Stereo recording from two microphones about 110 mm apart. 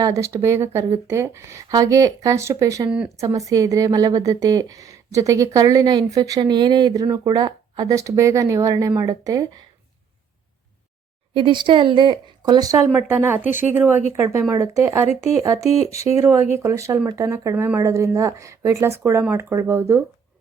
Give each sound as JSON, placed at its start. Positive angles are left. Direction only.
{"t": 0.0, "sound": "a woman's voice", "side_deg": -30}
{"t": 11.3, "sound": "a woman's voice", "side_deg": -45}
{"t": 12.9, "sound": "speech", "side_deg": -20}